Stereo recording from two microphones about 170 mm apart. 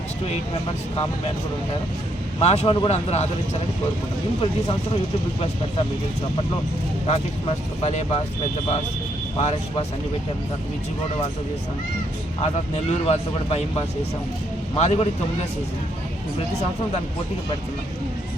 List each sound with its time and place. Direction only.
2.4 s speech: 40° left (ahead or behind)
7.1 s speech: 35° left (ahead or behind)
9.4 s speech: 40° left (ahead or behind)
12.4 s speech: 40° left (ahead or behind)
14.8 s speech: 40° left (ahead or behind)